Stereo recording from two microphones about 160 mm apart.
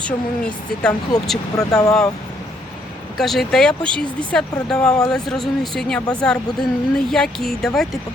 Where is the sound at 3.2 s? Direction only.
Centre (ahead or behind).